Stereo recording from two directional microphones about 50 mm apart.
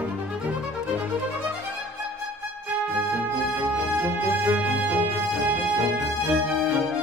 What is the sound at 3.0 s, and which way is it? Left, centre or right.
Music, right.